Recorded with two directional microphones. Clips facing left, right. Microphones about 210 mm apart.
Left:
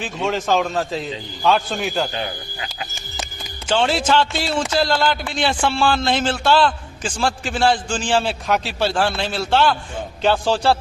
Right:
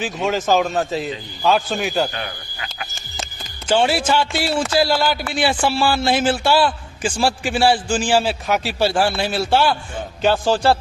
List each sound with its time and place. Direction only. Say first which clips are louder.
0.0 s a man's voice: right 2 dB; 5° right (ahead or behind)
2.1 s speech: left 3 dB; 25° left (ahead or behind)
3.7 s a man's voice: right 1 dB; 10° right (ahead or behind)